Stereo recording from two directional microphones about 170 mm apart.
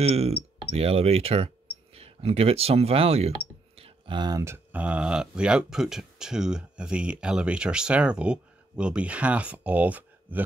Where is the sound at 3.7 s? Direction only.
35° right (ahead or behind).